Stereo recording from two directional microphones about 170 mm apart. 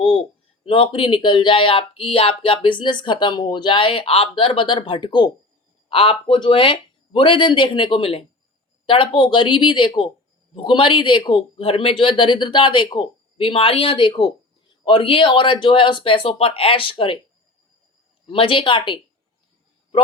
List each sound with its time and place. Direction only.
0.6 s a man's voice: 30° left (ahead or behind)
18.3 s a man's voice: 30° left (ahead or behind)